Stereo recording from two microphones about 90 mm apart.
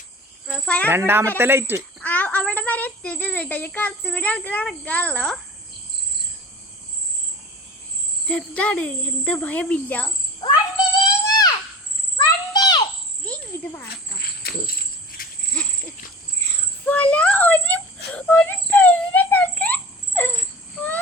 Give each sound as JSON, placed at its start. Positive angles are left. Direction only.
{"t": 0.4, "sound": "a child's voice", "side_deg": 10}
{"t": 0.9, "sound": "speech", "side_deg": -25}
{"t": 2.0, "sound": "a child's voice", "side_deg": 15}
{"t": 8.3, "sound": "a child's voice", "side_deg": 15}
{"t": 11.0, "sound": "a sound", "side_deg": 45}
{"t": 12.1, "sound": "insect", "side_deg": 50}
{"t": 13.5, "sound": "cricket", "side_deg": 30}
{"t": 15.6, "sound": "a sound", "side_deg": 10}
{"t": 16.8, "sound": "a sound", "side_deg": 15}